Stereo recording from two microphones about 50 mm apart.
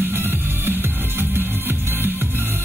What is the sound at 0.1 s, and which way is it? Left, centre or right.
Music, right.